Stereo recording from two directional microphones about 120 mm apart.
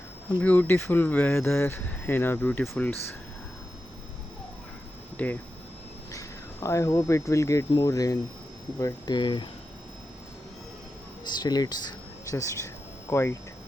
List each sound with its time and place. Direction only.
0.4 s speech: 15° left (ahead or behind)
5.1 s speech: 15° left (ahead or behind)
6.1 s speech: 25° left (ahead or behind)
11.3 s speech: 35° left (ahead or behind)
12.3 s speech: 25° left (ahead or behind)